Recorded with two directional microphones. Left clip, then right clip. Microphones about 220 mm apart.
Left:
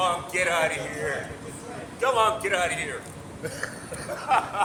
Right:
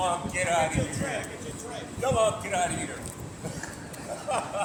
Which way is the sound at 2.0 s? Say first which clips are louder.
Left 3 dB; 20° left (ahead or behind).